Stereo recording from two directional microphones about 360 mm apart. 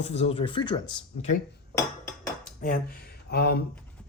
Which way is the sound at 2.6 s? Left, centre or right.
Left.